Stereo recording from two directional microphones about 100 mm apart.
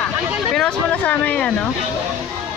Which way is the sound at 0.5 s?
10° left (ahead or behind).